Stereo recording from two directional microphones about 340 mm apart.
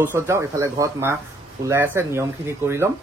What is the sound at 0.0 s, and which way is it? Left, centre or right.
A man's voice, centre.